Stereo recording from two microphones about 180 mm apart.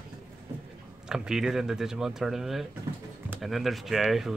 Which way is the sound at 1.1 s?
5° right (ahead or behind).